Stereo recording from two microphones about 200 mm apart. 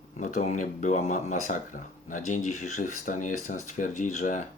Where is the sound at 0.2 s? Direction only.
40° left (ahead or behind).